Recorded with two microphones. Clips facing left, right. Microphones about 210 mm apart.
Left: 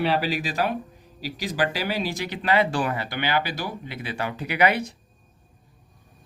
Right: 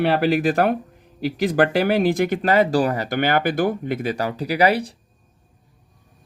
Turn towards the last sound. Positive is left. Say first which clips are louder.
# right 4 dB
turn(degrees=-35)  # may be behind; listen again after turning